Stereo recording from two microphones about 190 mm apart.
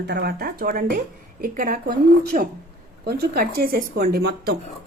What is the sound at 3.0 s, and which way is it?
Speech, 55° right (ahead or behind).